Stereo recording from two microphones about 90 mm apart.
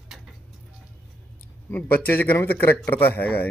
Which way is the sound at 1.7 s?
20° left (ahead or behind).